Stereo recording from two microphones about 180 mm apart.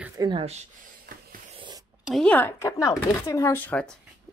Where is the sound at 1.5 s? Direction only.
25° right (ahead or behind).